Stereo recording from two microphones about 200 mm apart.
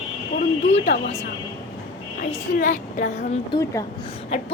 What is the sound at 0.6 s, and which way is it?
Speech, 35° left (ahead or behind).